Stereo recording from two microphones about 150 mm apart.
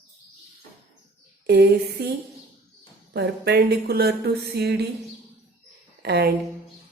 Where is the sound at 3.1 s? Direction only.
90° right.